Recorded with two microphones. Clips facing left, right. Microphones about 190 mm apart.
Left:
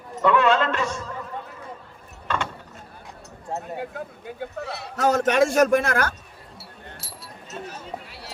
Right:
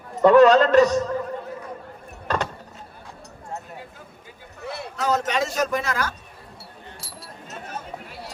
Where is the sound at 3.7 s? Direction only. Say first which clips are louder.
Left 9 dB; 60° left (ahead or behind).